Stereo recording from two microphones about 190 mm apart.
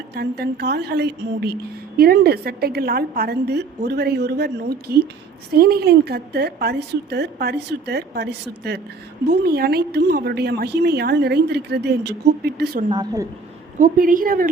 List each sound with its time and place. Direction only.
0.1 s a woman's voice: 55° right (ahead or behind)
12.9 s a woman's voice: 20° right (ahead or behind)
13.7 s a woman's voice: 45° right (ahead or behind)